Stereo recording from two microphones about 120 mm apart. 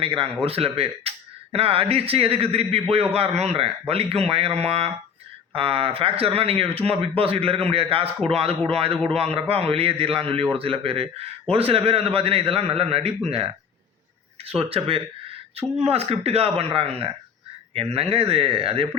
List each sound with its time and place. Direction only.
0.4 s a man's voice: 55° right (ahead or behind)
14.4 s a man's voice: 55° right (ahead or behind)